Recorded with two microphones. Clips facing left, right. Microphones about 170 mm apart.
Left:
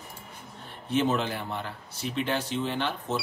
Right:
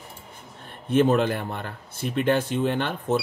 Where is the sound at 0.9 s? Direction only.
55° right (ahead or behind).